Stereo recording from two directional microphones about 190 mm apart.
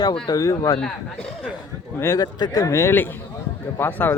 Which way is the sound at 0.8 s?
5° left (ahead or behind).